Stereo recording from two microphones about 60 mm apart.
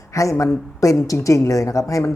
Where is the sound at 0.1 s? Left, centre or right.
Left.